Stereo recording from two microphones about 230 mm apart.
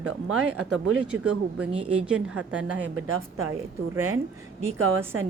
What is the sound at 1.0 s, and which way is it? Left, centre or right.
Speech, centre.